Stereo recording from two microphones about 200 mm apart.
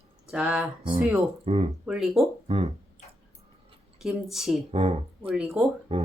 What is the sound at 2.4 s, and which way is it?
Speech, 30° right (ahead or behind).